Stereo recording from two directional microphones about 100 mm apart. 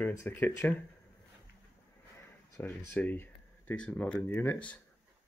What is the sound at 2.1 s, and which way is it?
Speech, 30° left (ahead or behind).